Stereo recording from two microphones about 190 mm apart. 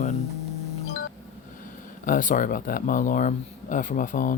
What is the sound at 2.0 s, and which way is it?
Speech, 45° left (ahead or behind).